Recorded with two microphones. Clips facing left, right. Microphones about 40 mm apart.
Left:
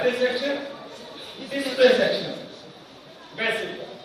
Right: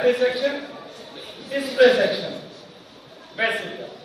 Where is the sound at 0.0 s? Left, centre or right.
Right.